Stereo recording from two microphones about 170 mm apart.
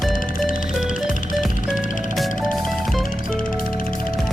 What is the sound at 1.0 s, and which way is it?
Music, 50° left (ahead or behind).